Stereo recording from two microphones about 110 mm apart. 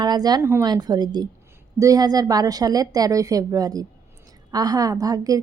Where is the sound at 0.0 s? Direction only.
40° right (ahead or behind).